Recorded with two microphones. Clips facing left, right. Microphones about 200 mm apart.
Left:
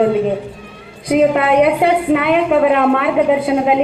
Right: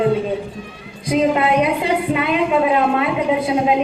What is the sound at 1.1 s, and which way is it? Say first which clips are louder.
A woman's voice: left 4 dB; 60° left (ahead or behind).